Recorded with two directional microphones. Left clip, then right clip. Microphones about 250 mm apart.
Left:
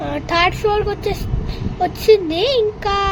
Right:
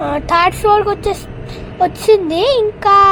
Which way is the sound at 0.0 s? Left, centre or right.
Centre.